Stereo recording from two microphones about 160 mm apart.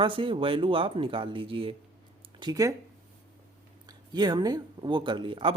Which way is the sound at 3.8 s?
25° right (ahead or behind).